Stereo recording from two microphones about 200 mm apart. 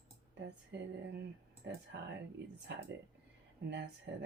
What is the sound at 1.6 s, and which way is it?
Speech, 65° right (ahead or behind).